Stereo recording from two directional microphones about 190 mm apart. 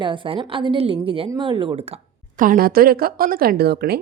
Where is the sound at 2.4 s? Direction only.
50° right (ahead or behind).